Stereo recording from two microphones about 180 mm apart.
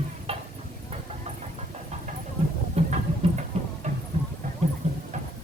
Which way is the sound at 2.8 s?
35° right (ahead or behind).